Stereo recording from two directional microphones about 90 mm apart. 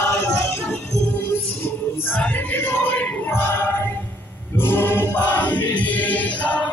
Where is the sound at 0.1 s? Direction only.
35° left (ahead or behind).